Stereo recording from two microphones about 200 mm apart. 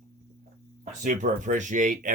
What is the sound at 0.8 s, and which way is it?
Speech, 40° right (ahead or behind).